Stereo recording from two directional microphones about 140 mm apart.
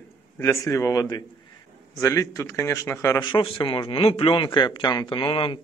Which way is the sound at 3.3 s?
35° left (ahead or behind).